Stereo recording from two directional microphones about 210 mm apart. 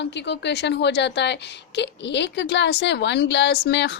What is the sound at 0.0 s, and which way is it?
A woman's voice, 55° left (ahead or behind).